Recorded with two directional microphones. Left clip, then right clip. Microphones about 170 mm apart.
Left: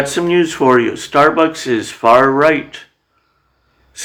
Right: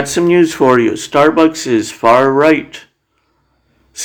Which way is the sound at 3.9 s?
30° right (ahead or behind).